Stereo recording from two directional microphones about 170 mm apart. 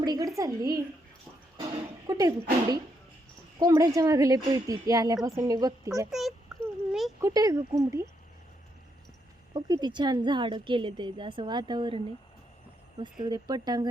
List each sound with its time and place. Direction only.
0.0 s a woman's voice: 25° right (ahead or behind)
2.0 s a woman's voice: 20° right (ahead or behind)
6.1 s a sound: centre (ahead or behind)
7.2 s a woman's voice: 20° right (ahead or behind)
9.5 s a woman's voice: 25° right (ahead or behind)
13.2 s a woman's voice: 25° right (ahead or behind)